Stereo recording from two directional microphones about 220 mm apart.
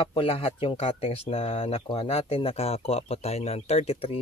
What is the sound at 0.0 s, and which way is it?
Speech, 25° left (ahead or behind).